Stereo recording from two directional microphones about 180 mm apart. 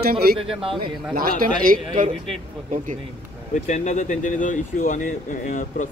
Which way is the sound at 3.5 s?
40° left (ahead or behind).